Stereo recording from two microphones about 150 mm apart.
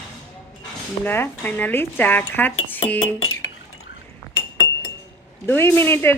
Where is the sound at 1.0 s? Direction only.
15° left (ahead or behind).